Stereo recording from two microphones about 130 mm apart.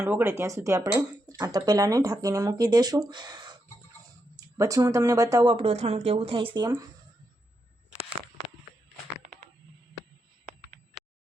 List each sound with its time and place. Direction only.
0.0 s speech: 20° right (ahead or behind)
5.5 s speech: 50° right (ahead or behind)